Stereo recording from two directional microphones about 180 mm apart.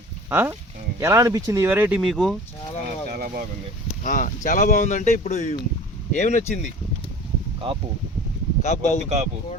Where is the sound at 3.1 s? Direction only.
55° right (ahead or behind).